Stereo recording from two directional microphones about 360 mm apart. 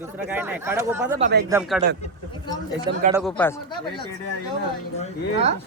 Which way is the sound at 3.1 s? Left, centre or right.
Centre.